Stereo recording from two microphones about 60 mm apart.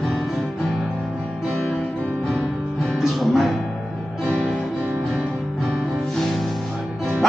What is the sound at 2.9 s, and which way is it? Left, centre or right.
Music, centre.